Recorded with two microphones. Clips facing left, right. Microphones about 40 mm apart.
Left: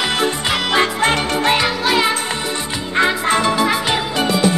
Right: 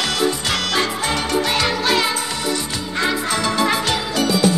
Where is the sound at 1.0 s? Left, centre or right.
Left.